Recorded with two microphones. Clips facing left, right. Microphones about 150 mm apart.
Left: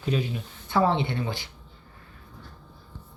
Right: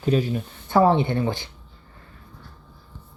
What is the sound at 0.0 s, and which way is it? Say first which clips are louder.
Speech: right 6 dB; 45° right (ahead or behind).